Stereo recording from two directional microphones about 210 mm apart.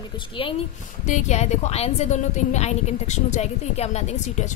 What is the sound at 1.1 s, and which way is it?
A woman's voice, 35° left (ahead or behind).